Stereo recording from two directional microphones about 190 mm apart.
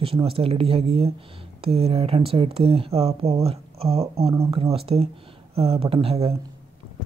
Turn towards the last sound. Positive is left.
turn(degrees=-30)  # may be behind; listen again after turning